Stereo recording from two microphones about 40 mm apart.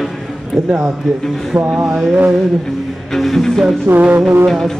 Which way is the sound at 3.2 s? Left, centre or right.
Centre.